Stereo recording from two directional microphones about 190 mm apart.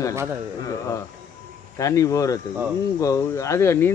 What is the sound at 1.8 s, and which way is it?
Speech, 15° left (ahead or behind).